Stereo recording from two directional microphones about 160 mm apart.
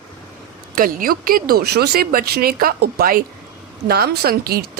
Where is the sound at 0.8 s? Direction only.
60° right (ahead or behind).